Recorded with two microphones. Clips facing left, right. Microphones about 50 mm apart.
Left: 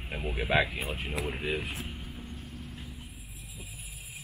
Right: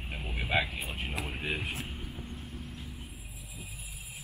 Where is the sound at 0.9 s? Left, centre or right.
Centre.